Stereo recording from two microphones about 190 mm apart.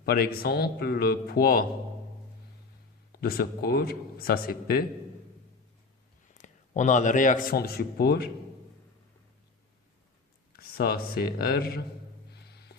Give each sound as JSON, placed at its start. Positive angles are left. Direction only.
{"t": 0.0, "sound": "a man's voice", "side_deg": 55}
{"t": 3.1, "sound": "a man's voice", "side_deg": 55}
{"t": 6.3, "sound": "a man's voice", "side_deg": 40}
{"t": 10.6, "sound": "speech", "side_deg": 55}
{"t": 12.3, "sound": "music", "side_deg": 60}